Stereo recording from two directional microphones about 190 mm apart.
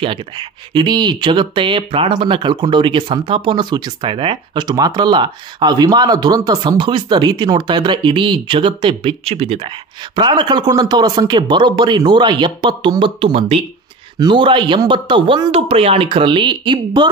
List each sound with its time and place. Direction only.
0.0 s speech: 25° right (ahead or behind)